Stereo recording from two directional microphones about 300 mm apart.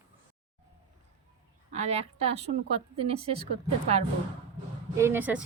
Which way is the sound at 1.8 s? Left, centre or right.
Right.